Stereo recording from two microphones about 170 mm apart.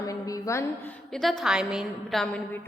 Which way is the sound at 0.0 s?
20° left (ahead or behind).